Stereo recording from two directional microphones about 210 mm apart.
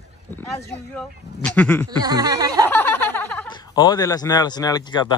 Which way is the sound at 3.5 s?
20° left (ahead or behind).